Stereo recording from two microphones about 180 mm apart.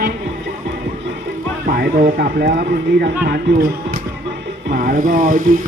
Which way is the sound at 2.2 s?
65° right (ahead or behind).